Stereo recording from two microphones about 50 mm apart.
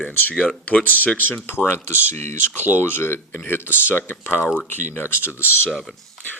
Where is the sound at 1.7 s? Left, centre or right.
Left.